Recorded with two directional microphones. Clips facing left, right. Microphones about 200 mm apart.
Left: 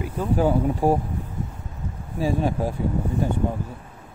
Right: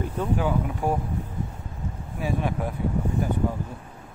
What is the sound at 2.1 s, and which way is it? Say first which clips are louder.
Speech: left 4 dB; 30° left (ahead or behind).